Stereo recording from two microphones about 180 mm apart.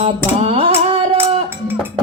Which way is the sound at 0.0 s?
35° right (ahead or behind).